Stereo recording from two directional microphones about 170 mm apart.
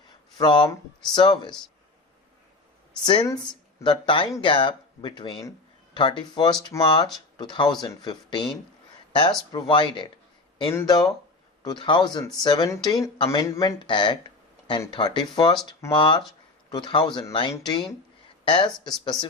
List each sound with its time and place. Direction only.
0.3 s speech: 25° left (ahead or behind)
3.0 s speech: 25° left (ahead or behind)
9.5 s speech: 25° left (ahead or behind)